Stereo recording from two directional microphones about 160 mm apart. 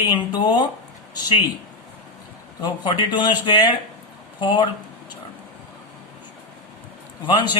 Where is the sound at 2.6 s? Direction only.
30° left (ahead or behind).